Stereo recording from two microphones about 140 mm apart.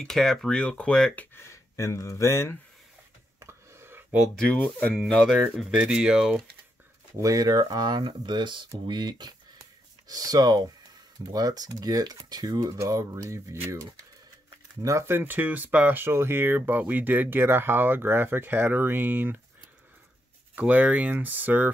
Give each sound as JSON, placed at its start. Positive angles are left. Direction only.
{"t": 0.0, "sound": "speech", "side_deg": 0}
{"t": 1.3, "sound": "speech", "side_deg": 20}
{"t": 3.3, "sound": "a sound", "side_deg": -20}
{"t": 4.2, "sound": "speech", "side_deg": 5}
{"t": 7.2, "sound": "speech", "side_deg": -25}
{"t": 20.5, "sound": "speech", "side_deg": -10}